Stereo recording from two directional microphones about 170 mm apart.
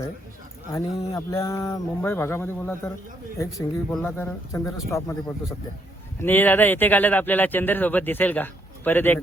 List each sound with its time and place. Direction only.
0.7 s speech: 20° left (ahead or behind)
6.2 s speech: 10° left (ahead or behind)